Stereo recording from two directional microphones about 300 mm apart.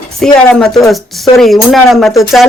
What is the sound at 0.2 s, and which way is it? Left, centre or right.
A woman's voice, centre.